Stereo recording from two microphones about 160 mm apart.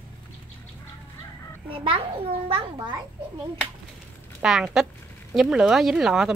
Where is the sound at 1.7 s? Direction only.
35° right (ahead or behind).